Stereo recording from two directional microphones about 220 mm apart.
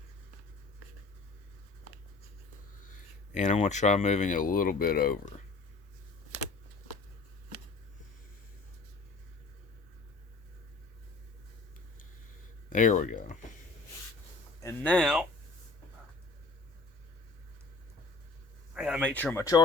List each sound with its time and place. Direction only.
3.3 s speech: 30° left (ahead or behind)
12.7 s speech: 35° left (ahead or behind)
14.6 s speech: 10° left (ahead or behind)
18.7 s speech: 5° right (ahead or behind); by 19.6 s 15° left (ahead or behind)